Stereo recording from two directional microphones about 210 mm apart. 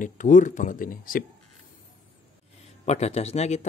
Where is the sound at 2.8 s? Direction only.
30° left (ahead or behind).